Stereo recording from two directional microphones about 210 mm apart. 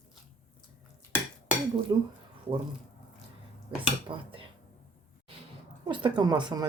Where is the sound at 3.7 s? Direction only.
25° right (ahead or behind).